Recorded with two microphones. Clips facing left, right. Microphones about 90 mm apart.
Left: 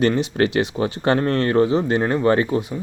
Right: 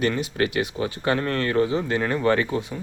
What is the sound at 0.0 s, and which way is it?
Speech, 35° left (ahead or behind).